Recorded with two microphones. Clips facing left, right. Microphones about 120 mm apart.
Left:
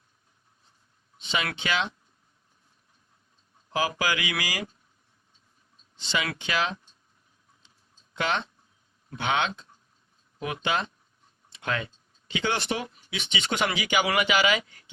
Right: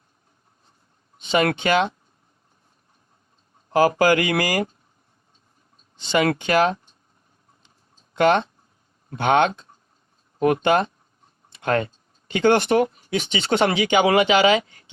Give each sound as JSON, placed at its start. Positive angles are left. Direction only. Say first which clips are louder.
{"t": 1.2, "sound": "speech", "louder": "right 10 dB", "side_deg": -50}
{"t": 3.7, "sound": "speech", "louder": "right 11 dB", "side_deg": -50}
{"t": 6.0, "sound": "speech", "louder": "right 10 dB", "side_deg": -50}
{"t": 8.1, "sound": "speech", "louder": "right 11 dB", "side_deg": -50}
{"t": 14.6, "sound": "speech", "louder": "right 2 dB", "side_deg": -45}